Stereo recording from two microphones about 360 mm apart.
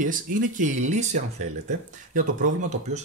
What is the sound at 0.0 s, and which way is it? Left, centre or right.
Speech, right.